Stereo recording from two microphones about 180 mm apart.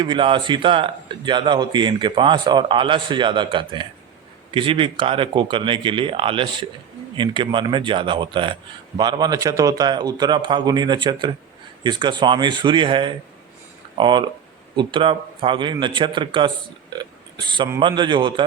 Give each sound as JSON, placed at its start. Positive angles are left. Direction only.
{"t": 0.0, "sound": "speech", "side_deg": -25}
{"t": 17.0, "sound": "a sound", "side_deg": -25}
{"t": 17.7, "sound": "speech", "side_deg": -25}